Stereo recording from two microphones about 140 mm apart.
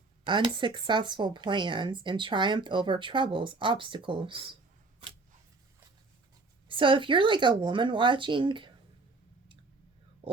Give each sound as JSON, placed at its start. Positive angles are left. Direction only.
{"t": 0.3, "sound": "speech", "side_deg": -35}
{"t": 6.7, "sound": "speech", "side_deg": -35}
{"t": 10.2, "sound": "a sound", "side_deg": -40}